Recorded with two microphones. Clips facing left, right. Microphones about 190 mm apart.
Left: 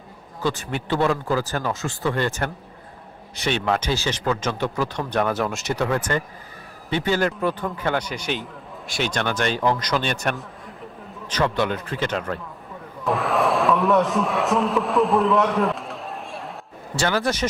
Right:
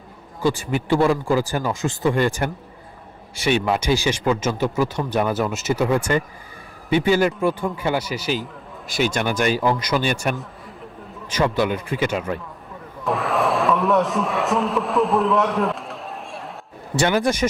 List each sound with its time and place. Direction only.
0.4 s a man's voice: 10° right (ahead or behind)
16.9 s speech: 20° right (ahead or behind)